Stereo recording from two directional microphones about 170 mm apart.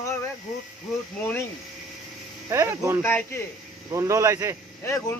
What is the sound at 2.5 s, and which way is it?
Speech, 15° right (ahead or behind).